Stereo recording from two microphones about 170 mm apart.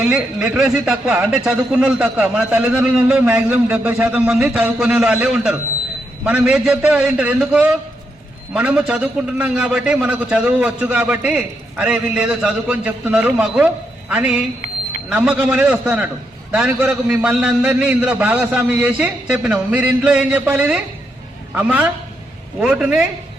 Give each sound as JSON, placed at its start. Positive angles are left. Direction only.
{"t": 0.0, "sound": "a man's voice", "side_deg": -5}